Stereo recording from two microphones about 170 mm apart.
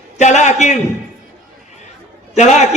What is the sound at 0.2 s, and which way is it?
Speech, 45° left (ahead or behind).